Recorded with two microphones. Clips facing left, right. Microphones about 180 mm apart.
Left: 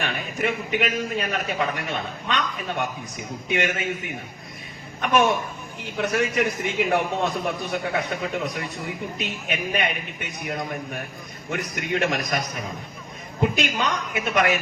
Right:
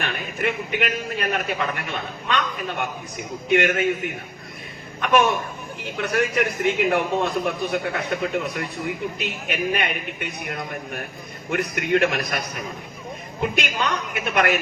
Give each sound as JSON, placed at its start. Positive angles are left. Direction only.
{"t": 0.0, "sound": "a man's voice", "side_deg": -55}
{"t": 11.5, "sound": "a man's voice", "side_deg": -55}
{"t": 13.6, "sound": "a man's voice", "side_deg": -55}